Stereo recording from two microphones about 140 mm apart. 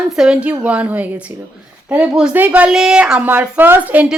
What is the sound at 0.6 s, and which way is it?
A woman's voice, 10° right (ahead or behind).